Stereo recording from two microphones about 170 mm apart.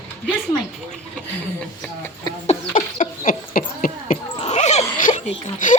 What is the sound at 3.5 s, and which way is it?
Dog, 55° left (ahead or behind).